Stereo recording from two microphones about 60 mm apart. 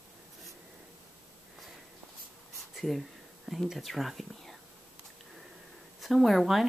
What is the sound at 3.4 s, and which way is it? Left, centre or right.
Speech, centre.